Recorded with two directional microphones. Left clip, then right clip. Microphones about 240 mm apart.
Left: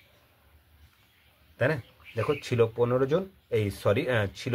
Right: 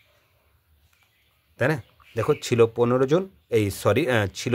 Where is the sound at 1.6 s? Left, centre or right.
Right.